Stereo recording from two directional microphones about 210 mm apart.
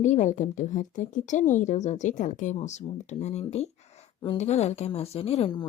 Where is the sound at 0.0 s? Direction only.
35° left (ahead or behind).